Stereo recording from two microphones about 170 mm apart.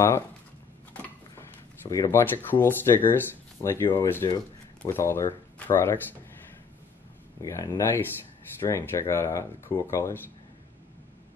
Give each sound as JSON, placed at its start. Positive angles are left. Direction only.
{"t": 1.3, "sound": "speech", "side_deg": 15}
{"t": 7.4, "sound": "speech", "side_deg": 20}